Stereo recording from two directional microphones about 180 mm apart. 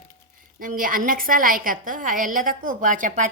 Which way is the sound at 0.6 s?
50° right (ahead or behind).